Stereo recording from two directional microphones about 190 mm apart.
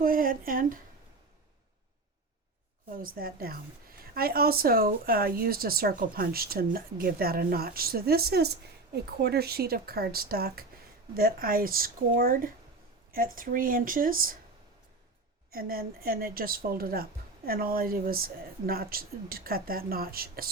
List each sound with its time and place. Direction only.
0.0 s a woman's voice: 50° right (ahead or behind)
2.9 s a woman's voice: 50° right (ahead or behind)
15.5 s a woman's voice: 50° right (ahead or behind)